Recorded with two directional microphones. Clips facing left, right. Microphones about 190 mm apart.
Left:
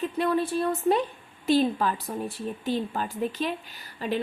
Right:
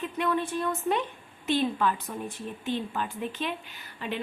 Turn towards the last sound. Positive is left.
turn(degrees=40)  # may be behind; listen again after turning